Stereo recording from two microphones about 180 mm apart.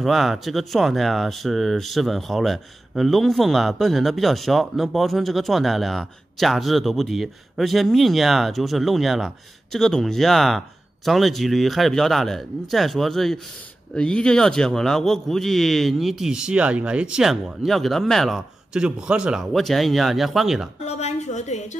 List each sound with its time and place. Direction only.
0.0 s speech: centre (ahead or behind)
20.8 s a woman's voice: 40° left (ahead or behind)